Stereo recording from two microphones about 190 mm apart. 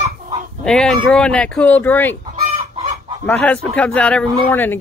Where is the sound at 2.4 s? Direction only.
30° right (ahead or behind).